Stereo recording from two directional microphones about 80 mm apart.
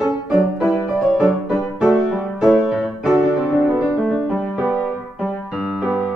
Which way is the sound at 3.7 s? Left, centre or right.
Centre.